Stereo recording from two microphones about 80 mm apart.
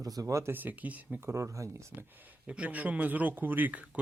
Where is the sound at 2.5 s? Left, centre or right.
Centre.